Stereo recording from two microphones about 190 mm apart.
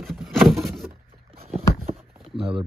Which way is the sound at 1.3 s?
35° right (ahead or behind).